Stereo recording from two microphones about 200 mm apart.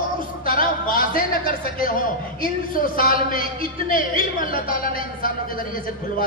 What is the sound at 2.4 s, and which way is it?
A woman's voice, 45° left (ahead or behind).